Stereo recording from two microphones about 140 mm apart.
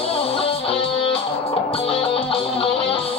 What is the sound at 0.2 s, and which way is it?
Music, 40° left (ahead or behind).